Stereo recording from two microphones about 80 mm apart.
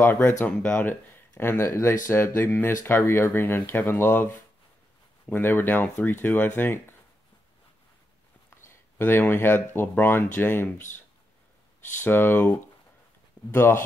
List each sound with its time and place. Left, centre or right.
0.0 s speech: left
0.7 s speech: left
5.3 s speech: left
8.6 s speech: left
12.0 s speech: left